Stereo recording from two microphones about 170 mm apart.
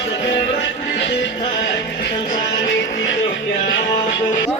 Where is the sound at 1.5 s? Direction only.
75° left (ahead or behind).